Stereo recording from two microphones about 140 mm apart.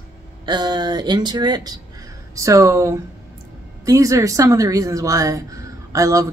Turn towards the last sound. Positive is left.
turn(degrees=-25)  # may be behind; listen again after turning